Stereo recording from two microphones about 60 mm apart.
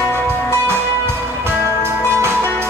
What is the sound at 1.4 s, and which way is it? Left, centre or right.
Music, right.